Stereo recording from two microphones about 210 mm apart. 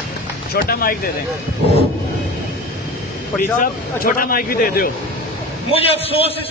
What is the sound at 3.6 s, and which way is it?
Speech, 40° left (ahead or behind).